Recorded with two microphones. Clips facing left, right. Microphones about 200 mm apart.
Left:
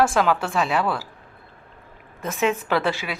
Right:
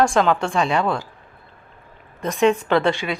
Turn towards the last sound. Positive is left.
turn(degrees=5)  # may be behind; listen again after turning